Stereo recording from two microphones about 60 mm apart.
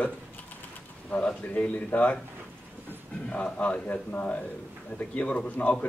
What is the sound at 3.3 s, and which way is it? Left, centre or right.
Speech, left.